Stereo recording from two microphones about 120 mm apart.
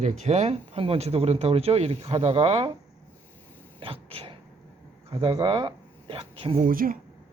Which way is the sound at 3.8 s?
50° right (ahead or behind).